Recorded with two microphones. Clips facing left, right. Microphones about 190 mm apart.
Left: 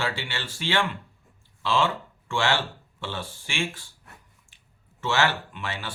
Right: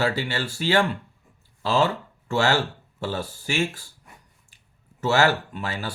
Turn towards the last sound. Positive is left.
turn(degrees=-40)  # may be behind; listen again after turning